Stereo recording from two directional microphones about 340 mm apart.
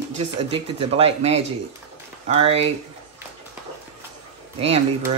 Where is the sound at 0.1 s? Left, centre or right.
Centre.